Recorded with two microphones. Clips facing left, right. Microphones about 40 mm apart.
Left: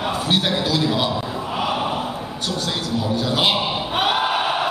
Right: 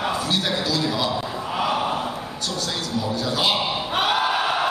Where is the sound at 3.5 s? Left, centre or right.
Centre.